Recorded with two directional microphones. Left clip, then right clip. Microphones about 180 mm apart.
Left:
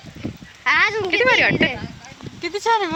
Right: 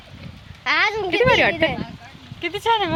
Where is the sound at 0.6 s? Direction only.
65° right (ahead or behind).